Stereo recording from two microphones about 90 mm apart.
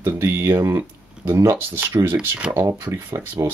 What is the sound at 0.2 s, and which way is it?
Speech, 35° right (ahead or behind).